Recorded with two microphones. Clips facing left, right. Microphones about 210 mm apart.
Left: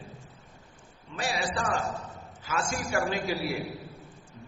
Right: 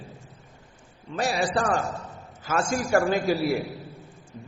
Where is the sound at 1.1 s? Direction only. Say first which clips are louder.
Right 6 dB; 40° right (ahead or behind).